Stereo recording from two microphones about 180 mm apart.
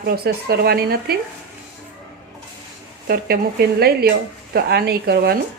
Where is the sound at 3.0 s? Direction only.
60° right (ahead or behind).